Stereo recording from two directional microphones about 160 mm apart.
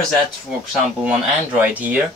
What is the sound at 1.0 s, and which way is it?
Speech, 10° right (ahead or behind).